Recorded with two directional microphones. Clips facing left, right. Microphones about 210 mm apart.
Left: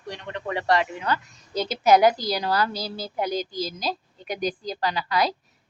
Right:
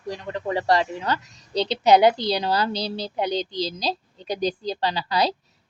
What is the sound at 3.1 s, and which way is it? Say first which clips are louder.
A woman's voice: even; 25° right (ahead or behind).